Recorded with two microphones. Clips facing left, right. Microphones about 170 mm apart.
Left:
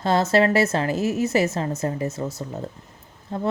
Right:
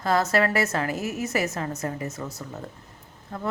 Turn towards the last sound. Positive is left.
turn(degrees=30)  # may be behind; listen again after turning